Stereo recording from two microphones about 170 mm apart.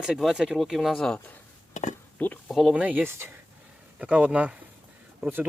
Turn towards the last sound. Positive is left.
turn(degrees=-10)  # may be behind; listen again after turning